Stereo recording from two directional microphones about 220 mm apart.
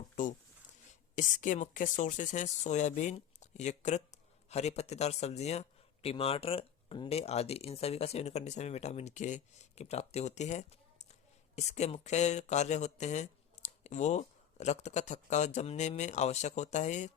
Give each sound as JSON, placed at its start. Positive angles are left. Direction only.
{"t": 0.2, "sound": "speech", "side_deg": 35}